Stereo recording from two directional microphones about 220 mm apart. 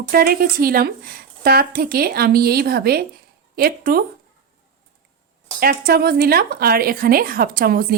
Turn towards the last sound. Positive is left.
turn(degrees=-40)  # may be behind; listen again after turning